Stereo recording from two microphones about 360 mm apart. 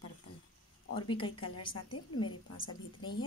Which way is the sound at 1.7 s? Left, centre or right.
Left.